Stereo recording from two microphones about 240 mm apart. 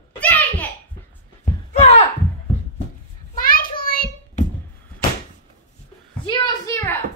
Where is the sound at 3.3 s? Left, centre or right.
Left.